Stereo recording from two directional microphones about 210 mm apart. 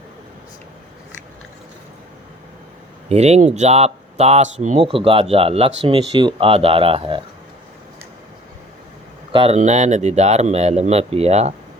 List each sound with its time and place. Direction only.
3.1 s speech: 30° right (ahead or behind)
9.3 s speech: 30° right (ahead or behind)